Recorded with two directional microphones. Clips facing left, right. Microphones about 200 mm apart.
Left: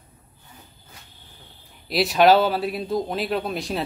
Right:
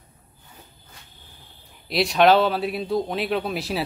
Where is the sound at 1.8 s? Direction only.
Centre (ahead or behind).